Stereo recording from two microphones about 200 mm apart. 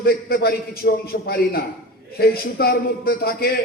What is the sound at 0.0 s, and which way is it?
A man's voice, 50° left (ahead or behind).